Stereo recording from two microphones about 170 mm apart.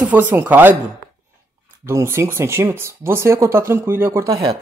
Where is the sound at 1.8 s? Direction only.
15° right (ahead or behind).